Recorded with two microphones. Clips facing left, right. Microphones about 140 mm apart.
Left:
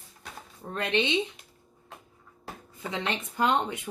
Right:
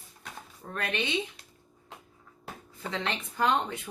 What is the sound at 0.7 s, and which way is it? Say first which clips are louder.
Speech: left 5 dB; 20° left (ahead or behind).